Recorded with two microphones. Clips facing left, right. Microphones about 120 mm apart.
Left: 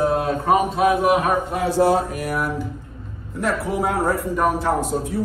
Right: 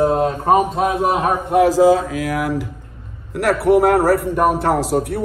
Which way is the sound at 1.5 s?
90° right.